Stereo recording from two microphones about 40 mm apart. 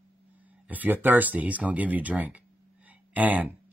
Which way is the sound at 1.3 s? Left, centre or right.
Right.